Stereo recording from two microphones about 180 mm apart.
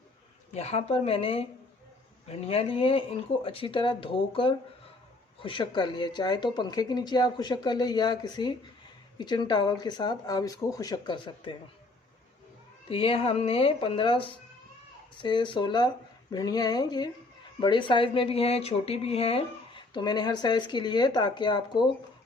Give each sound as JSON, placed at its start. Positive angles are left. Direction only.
{"t": 0.5, "sound": "a woman's voice", "side_deg": 35}
{"t": 12.9, "sound": "a woman's voice", "side_deg": 30}